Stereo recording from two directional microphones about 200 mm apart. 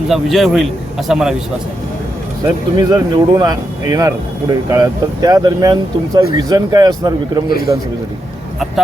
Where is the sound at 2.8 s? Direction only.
20° right (ahead or behind).